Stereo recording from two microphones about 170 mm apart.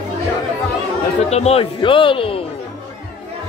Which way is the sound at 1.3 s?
40° left (ahead or behind).